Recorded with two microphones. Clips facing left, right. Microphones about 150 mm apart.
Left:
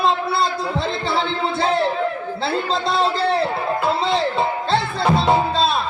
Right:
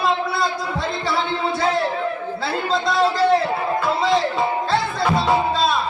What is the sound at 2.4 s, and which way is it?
Speech, 30° left (ahead or behind).